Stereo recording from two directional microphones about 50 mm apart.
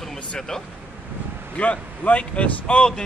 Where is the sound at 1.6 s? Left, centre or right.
Left.